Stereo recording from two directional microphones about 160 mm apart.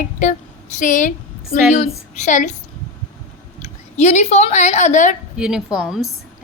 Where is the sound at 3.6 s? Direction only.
45° left (ahead or behind).